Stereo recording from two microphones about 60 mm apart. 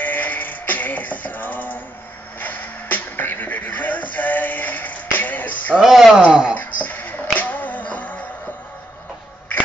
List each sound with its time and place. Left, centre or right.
0.0 s music: left
5.8 s speech: centre
6.5 s music: left